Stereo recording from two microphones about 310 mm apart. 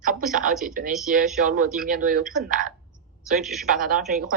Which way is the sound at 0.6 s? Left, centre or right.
Right.